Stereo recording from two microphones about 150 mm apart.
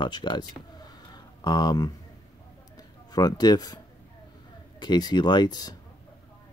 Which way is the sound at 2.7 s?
25° left (ahead or behind).